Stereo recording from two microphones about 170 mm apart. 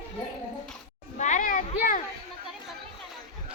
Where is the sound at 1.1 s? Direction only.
45° left (ahead or behind).